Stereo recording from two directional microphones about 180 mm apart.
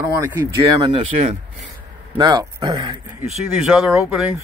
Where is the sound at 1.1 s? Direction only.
40° right (ahead or behind).